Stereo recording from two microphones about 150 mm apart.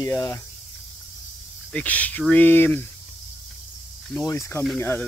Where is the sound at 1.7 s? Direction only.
10° left (ahead or behind).